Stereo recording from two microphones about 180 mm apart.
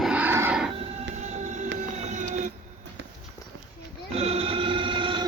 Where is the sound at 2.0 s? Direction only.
40° right (ahead or behind).